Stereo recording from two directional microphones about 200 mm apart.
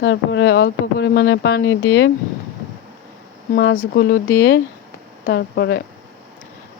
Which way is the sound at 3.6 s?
55° left (ahead or behind).